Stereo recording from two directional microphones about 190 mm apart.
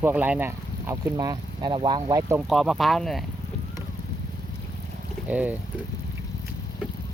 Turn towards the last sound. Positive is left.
turn(degrees=-10)  # may be behind; listen again after turning